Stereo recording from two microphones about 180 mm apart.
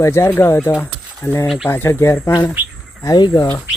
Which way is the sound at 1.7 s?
10° left (ahead or behind).